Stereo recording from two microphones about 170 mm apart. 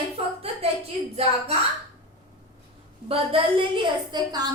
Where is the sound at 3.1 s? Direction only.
30° right (ahead or behind).